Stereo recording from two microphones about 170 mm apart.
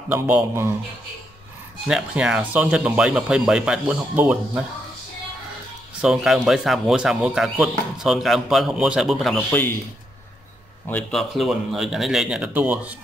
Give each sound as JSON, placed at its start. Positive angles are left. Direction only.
{"t": 0.1, "sound": "speech", "side_deg": -15}
{"t": 1.9, "sound": "speech", "side_deg": -5}
{"t": 5.9, "sound": "speech", "side_deg": -5}
{"t": 10.9, "sound": "speech", "side_deg": 5}